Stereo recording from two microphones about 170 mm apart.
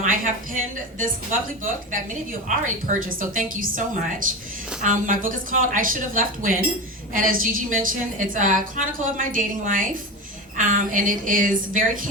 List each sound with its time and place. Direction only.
0.0 s a woman's voice: 50° right (ahead or behind)